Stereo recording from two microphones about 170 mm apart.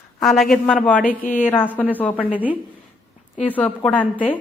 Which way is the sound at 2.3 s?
10° right (ahead or behind).